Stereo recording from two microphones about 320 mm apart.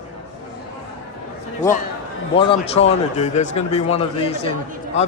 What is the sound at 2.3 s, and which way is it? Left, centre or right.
A man's voice, centre.